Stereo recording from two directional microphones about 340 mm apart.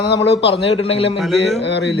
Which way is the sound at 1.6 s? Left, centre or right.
Left.